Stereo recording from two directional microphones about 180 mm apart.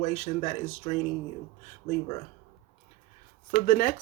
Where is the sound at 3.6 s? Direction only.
50° left (ahead or behind).